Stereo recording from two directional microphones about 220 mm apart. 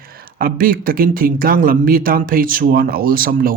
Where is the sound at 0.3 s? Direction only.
40° right (ahead or behind).